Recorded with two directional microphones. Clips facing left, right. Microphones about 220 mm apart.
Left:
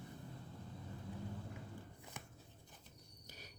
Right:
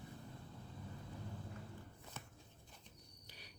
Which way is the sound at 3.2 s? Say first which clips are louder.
Left 5 dB; 45° left (ahead or behind).